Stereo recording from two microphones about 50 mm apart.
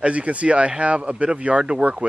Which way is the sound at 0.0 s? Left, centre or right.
Right.